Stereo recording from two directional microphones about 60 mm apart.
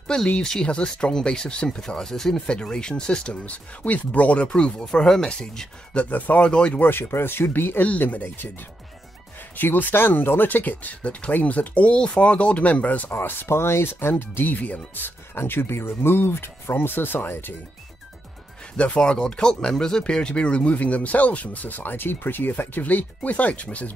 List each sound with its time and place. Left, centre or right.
0.4 s speech: centre
5.9 s speech: left
6.4 s speech: centre
6.8 s speech: left
9.6 s speech: left
13.1 s speech: left
18.8 s speech: centre